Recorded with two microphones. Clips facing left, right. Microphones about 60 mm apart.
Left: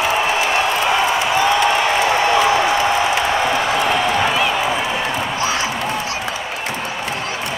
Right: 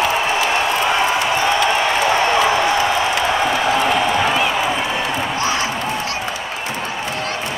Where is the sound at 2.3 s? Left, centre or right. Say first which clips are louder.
Left 1 dB; centre.